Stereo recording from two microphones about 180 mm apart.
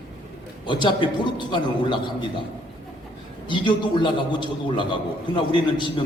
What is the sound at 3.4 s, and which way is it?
A man's voice, 25° left (ahead or behind).